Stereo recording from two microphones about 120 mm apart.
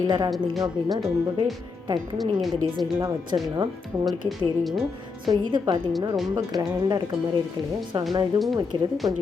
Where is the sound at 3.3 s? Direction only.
45° right (ahead or behind).